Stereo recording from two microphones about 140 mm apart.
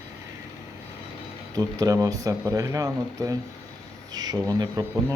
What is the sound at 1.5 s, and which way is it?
Speech, 25° right (ahead or behind).